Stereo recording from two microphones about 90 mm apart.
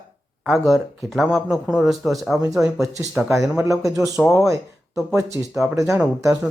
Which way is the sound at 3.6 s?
40° right (ahead or behind).